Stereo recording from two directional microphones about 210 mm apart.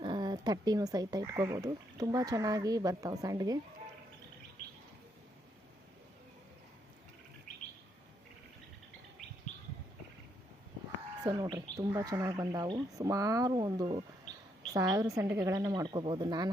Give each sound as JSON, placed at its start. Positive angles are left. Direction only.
{"t": 0.0, "sound": "speech", "side_deg": -20}
{"t": 11.2, "sound": "speech", "side_deg": -20}